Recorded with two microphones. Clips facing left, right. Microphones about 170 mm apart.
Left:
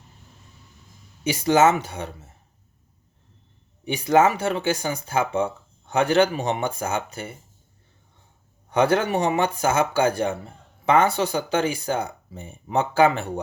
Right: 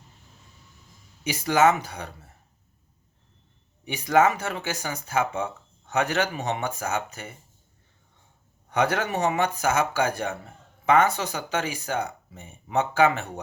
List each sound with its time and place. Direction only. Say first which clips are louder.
1.2 s speech: left 3 dB; 30° left (ahead or behind)
3.8 s speech: left 2 dB; 30° left (ahead or behind)
8.7 s speech: left 5 dB; 30° left (ahead or behind)